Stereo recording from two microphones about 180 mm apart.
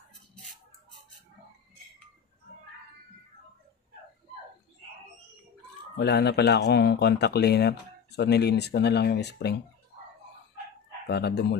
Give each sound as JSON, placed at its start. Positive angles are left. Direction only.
{"t": 5.9, "sound": "speech", "side_deg": 65}
{"t": 11.1, "sound": "speech", "side_deg": 65}